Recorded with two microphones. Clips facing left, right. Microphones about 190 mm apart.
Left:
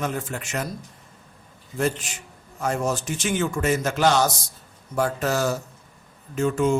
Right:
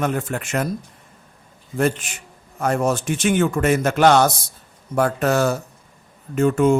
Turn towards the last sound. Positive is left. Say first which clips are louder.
# right 5 dB
turn(degrees=-55)  # may be behind; listen again after turning